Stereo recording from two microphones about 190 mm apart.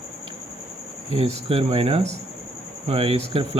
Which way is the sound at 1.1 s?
30° right (ahead or behind).